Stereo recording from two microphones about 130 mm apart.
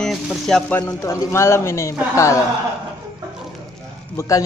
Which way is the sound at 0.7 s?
20° left (ahead or behind).